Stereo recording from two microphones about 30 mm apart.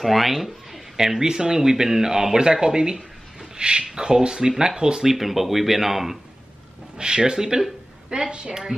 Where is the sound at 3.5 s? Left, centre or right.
Right.